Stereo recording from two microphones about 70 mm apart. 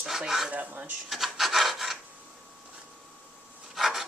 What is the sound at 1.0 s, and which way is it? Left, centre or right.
Rub, centre.